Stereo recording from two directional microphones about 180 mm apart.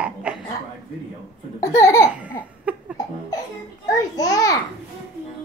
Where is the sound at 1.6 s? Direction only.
15° left (ahead or behind).